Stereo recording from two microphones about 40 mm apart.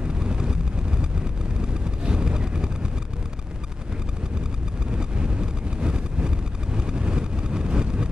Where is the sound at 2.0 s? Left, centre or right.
Right.